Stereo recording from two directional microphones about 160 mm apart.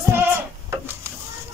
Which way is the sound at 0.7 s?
15° right (ahead or behind).